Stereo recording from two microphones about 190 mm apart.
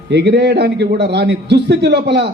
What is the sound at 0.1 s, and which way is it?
A man's voice, 60° right (ahead or behind).